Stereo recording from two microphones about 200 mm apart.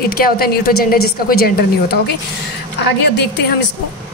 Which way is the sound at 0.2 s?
50° left (ahead or behind).